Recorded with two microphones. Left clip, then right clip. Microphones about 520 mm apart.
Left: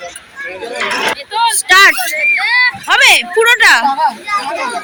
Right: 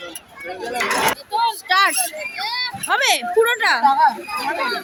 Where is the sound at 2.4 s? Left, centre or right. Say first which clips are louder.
Left 12 dB; right.